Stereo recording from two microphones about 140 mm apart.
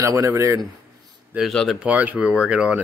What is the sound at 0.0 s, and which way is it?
Speech, 20° right (ahead or behind).